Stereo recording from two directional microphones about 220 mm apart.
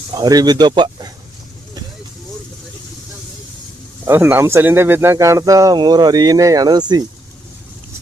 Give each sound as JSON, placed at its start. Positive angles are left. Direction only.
{"t": 0.1, "sound": "speech", "side_deg": -15}
{"t": 4.0, "sound": "speech", "side_deg": -10}